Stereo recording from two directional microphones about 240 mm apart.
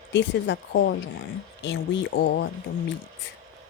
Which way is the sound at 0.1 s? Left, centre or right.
Left.